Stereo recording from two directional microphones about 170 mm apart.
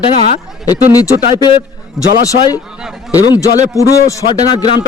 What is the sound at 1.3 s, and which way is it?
Speech, 30° left (ahead or behind).